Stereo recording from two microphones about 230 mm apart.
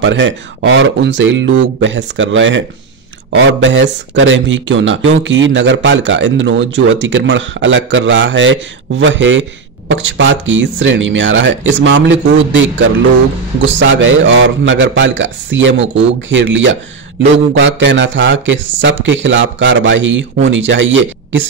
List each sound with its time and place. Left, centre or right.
0.0 s speech: right
3.6 s speech: right